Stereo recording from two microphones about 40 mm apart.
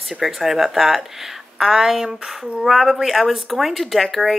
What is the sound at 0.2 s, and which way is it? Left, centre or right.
A woman's voice, centre.